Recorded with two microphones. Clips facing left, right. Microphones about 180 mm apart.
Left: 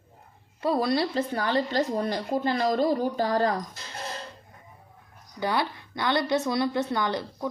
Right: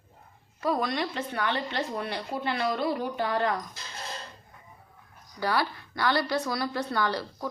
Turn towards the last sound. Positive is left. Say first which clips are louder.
# left 1 dB
turn(degrees=20)  # may be behind; listen again after turning